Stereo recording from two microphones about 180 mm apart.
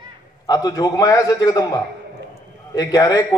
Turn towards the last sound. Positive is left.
turn(degrees=20)  # may be behind; listen again after turning